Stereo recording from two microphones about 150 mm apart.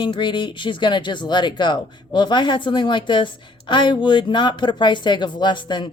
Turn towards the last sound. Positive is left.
turn(degrees=30)  # may be behind; listen again after turning